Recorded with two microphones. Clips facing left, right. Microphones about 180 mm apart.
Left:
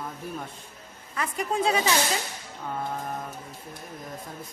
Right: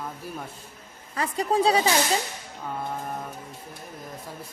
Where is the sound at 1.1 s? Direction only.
35° right (ahead or behind).